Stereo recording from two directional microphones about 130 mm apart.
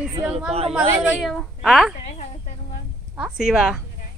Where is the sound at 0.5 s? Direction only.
50° right (ahead or behind).